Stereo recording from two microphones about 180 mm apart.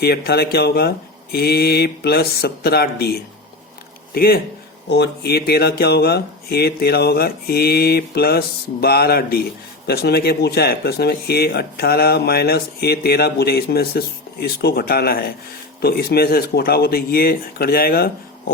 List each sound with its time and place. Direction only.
0.0 s speech: 60° left (ahead or behind)
4.9 s speech: 65° left (ahead or behind)